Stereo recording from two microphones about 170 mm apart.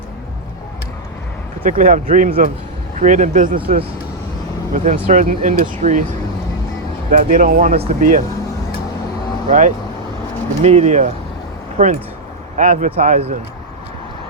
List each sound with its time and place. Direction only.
1.6 s speech: 55° right (ahead or behind)
4.7 s speech: 45° right (ahead or behind)
7.1 s speech: 55° right (ahead or behind)
9.5 s speech: 50° right (ahead or behind)